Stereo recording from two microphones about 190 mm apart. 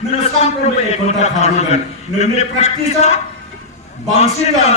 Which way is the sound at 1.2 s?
35° left (ahead or behind).